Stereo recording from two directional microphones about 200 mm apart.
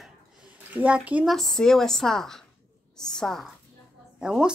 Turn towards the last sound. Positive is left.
turn(degrees=-5)  # may be behind; listen again after turning